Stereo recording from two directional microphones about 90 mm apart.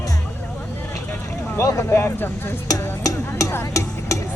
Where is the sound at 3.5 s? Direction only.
35° left (ahead or behind).